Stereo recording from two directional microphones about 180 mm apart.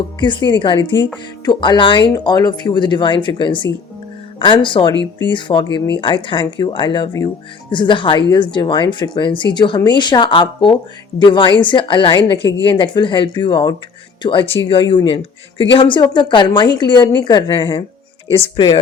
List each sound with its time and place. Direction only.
0.2 s speech: 25° left (ahead or behind)